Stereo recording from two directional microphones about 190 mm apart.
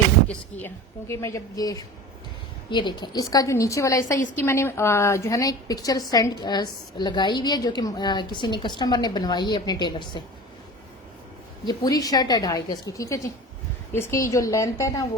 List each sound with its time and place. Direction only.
0.3 s a woman's voice: 10° left (ahead or behind)
11.6 s a woman's voice: 20° left (ahead or behind)